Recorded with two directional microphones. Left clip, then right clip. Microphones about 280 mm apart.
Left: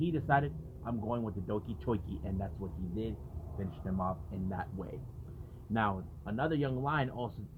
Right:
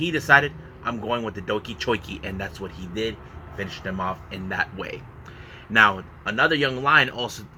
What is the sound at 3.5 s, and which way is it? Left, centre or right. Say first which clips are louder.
A man's voice: right 11 dB; centre.